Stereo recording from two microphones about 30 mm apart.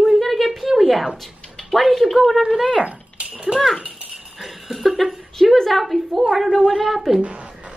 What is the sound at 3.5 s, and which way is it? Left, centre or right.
Speech, right.